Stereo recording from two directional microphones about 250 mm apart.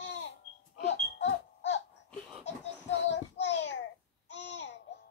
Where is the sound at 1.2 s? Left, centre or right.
Left.